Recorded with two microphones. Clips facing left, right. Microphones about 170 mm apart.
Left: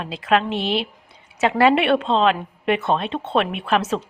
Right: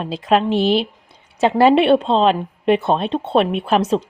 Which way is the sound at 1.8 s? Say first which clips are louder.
Right 4 dB; 35° right (ahead or behind).